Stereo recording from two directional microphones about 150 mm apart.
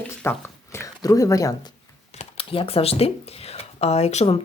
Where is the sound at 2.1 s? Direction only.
40° left (ahead or behind).